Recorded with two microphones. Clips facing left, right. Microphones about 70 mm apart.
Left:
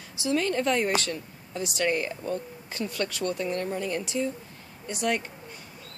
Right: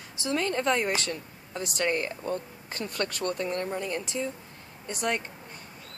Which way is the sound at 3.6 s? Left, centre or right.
Right.